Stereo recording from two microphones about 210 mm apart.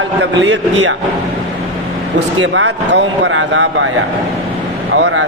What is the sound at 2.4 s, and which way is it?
Speech, 60° right (ahead or behind).